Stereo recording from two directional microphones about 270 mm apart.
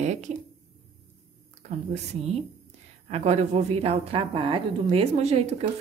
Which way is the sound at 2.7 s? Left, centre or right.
Right.